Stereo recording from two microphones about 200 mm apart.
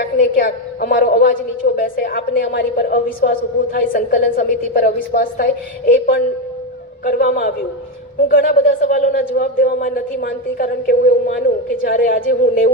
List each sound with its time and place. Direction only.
0.0 s a woman's voice: 50° left (ahead or behind)